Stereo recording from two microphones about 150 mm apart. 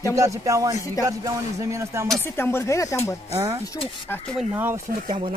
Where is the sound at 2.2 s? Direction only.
15° left (ahead or behind).